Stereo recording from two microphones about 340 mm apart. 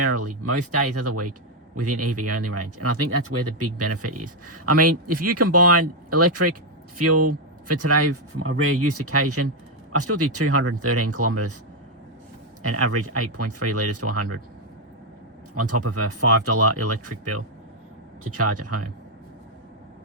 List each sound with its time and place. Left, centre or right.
0.0 s speech: right
12.6 s speech: right
15.5 s speech: right